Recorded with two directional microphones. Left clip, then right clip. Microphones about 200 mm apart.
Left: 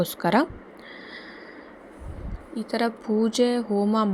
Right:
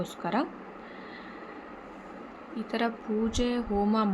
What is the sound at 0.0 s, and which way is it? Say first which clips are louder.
Speech: left 8 dB; 35° left (ahead or behind).